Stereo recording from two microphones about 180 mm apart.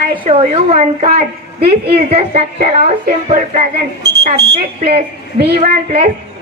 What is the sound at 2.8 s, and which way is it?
Speech, 40° right (ahead or behind).